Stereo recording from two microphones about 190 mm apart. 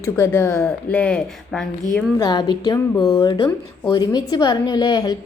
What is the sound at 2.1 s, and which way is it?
A woman's voice, 20° left (ahead or behind).